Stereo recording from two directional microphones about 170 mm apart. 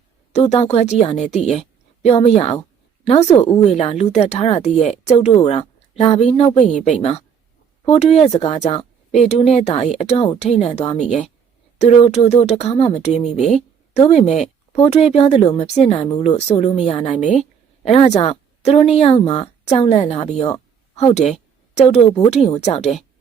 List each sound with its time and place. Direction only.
0.3 s a woman's voice: 40° left (ahead or behind)
20.9 s a sound: 40° left (ahead or behind)
22.3 s speech: 40° left (ahead or behind)